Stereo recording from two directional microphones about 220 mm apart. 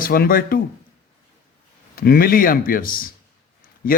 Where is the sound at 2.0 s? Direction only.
40° left (ahead or behind).